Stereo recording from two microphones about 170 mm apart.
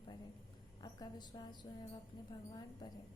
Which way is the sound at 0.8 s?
25° left (ahead or behind).